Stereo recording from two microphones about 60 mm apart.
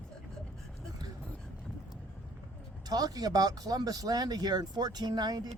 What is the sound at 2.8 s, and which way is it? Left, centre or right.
Speech, right.